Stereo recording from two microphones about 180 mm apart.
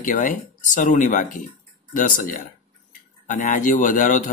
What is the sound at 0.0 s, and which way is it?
Speech, 50° left (ahead or behind).